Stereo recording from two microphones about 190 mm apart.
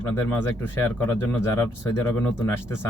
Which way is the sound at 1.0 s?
15° left (ahead or behind).